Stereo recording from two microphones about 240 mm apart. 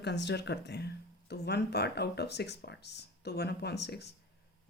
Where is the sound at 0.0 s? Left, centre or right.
Left.